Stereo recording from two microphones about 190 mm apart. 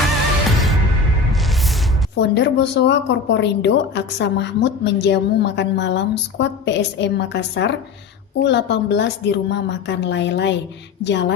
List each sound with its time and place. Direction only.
2.1 s speech: 65° left (ahead or behind)